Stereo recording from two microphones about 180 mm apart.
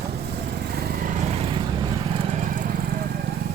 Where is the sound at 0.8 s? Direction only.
60° right (ahead or behind); by 1.5 s 40° right (ahead or behind).